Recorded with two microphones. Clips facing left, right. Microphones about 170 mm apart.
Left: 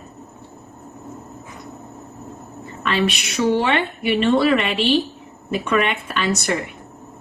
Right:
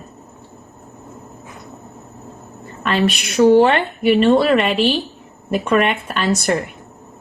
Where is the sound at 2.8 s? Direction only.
50° right (ahead or behind).